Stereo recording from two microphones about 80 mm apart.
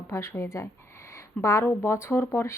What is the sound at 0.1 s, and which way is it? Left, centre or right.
A woman's voice, left.